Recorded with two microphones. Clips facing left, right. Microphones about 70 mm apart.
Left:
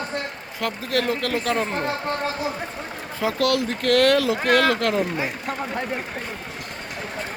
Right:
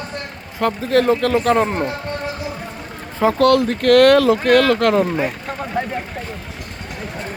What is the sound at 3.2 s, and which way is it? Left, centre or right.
Speech, right.